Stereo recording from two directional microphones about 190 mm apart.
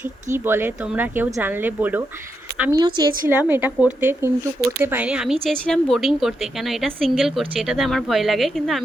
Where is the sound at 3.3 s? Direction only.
10° right (ahead or behind).